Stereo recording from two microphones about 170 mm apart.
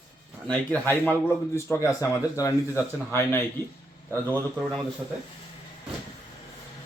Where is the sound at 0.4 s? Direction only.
10° left (ahead or behind).